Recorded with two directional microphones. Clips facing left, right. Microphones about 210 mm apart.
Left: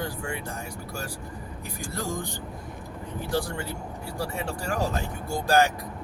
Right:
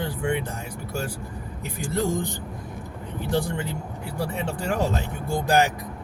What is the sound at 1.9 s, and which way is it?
Speech, 20° right (ahead or behind).